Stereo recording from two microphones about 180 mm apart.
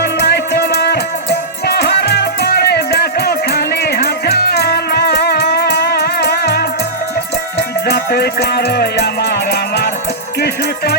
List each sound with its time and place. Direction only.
0.0 s music: 65° left (ahead or behind)
7.9 s music: 60° left (ahead or behind)